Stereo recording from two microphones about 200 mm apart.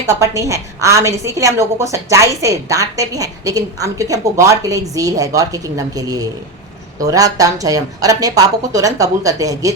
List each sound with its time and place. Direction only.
0.1 s a woman's voice: 15° right (ahead or behind)